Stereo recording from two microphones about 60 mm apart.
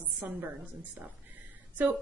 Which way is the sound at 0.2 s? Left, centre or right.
Right.